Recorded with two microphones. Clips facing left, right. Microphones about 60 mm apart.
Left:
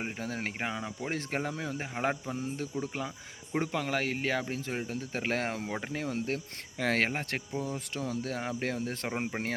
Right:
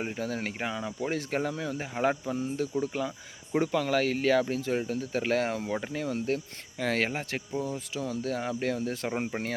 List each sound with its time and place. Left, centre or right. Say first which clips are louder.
0.2 s speech: right 3 dB; left
9.0 s speech: right 2 dB; centre